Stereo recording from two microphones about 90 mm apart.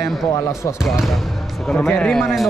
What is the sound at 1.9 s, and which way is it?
Speech, 10° left (ahead or behind).